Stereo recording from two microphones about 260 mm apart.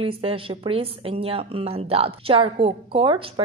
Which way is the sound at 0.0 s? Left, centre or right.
Right.